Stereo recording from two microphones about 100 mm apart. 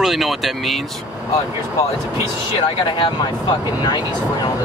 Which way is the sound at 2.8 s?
55° left (ahead or behind).